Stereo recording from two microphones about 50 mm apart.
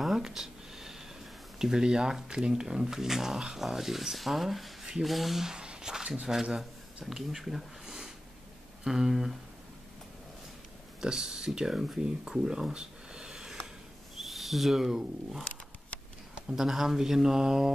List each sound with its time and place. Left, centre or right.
0.0 s a sound: centre
1.6 s speech: centre
11.0 s speech: centre
14.1 s speech: centre
15.9 s a sound: left
16.5 s speech: centre